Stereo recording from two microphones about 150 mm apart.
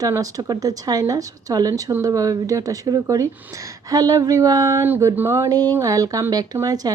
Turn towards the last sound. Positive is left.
turn(degrees=-25)  # may be behind; listen again after turning